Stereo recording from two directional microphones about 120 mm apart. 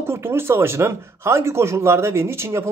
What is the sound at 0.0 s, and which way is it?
A man's voice, 20° right (ahead or behind).